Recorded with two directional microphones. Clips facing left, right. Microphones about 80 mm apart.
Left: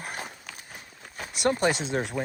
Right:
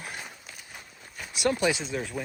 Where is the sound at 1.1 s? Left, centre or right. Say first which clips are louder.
Left 1 dB; left.